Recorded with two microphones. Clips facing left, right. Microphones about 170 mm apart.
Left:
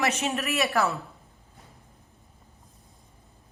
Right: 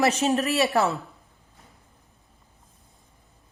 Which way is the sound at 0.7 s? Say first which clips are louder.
Right 3 dB; 20° right (ahead or behind).